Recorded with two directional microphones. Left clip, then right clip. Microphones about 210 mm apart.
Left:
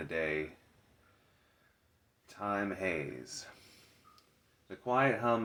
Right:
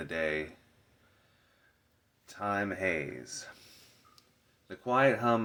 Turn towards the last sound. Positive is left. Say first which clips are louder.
# right 3 dB
turn(degrees=-25)  # may be behind; listen again after turning